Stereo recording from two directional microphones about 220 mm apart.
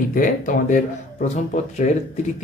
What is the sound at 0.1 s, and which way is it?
Speech, 40° left (ahead or behind).